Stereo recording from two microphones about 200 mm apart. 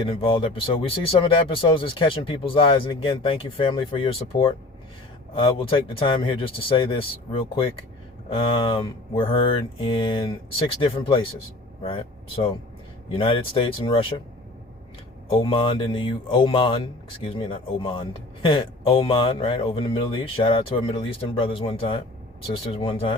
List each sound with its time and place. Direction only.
0.0 s speech: 25° left (ahead or behind)
15.3 s speech: 25° left (ahead or behind)